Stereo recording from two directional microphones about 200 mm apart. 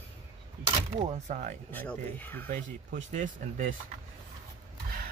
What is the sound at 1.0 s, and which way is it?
Speech, 35° right (ahead or behind).